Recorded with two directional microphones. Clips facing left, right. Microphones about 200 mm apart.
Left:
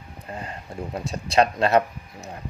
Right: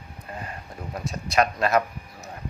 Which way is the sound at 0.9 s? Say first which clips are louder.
Left 2 dB; 30° left (ahead or behind).